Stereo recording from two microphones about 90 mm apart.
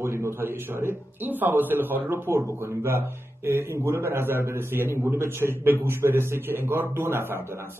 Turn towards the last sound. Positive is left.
turn(degrees=-25)  # may be behind; listen again after turning